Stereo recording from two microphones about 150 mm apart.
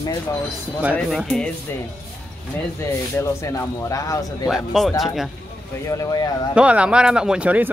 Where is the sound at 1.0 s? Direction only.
Centre (ahead or behind).